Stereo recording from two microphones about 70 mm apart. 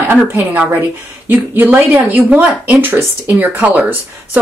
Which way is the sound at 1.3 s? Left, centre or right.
Right.